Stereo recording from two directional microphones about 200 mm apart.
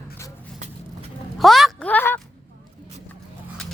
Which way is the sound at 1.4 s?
Centre (ahead or behind).